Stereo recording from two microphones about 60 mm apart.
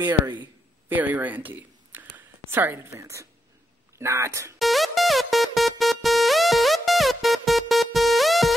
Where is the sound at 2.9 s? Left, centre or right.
Right.